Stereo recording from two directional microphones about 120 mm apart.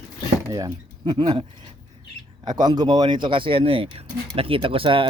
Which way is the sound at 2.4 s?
35° right (ahead or behind).